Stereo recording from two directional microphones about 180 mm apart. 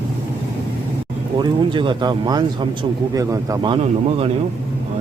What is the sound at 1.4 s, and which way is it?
Speech, 25° right (ahead or behind).